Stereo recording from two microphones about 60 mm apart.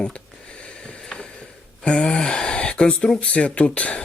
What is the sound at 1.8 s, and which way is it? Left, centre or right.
Speech, centre.